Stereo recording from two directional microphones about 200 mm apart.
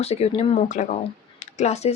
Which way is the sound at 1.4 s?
35° left (ahead or behind).